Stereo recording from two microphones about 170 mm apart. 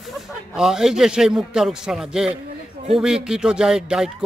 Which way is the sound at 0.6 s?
5° right (ahead or behind).